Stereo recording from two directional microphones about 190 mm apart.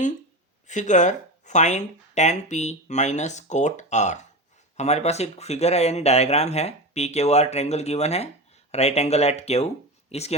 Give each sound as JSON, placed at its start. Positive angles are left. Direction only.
{"t": 0.7, "sound": "speech", "side_deg": 40}